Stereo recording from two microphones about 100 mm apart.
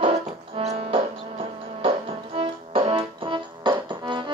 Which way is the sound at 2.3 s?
65° right (ahead or behind).